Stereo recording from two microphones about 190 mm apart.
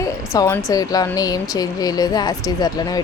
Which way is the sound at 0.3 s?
15° left (ahead or behind).